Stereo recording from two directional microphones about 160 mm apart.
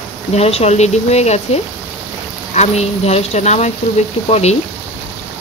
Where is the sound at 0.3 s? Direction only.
40° left (ahead or behind).